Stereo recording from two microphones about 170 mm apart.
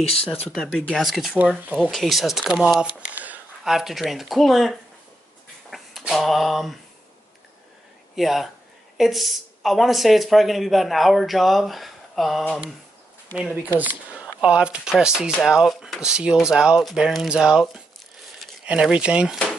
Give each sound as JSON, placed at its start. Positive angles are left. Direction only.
{"t": 0.0, "sound": "speech", "side_deg": 35}
{"t": 0.5, "sound": "speech", "side_deg": 5}
{"t": 5.7, "sound": "a sound", "side_deg": 0}
{"t": 8.2, "sound": "speech", "side_deg": 0}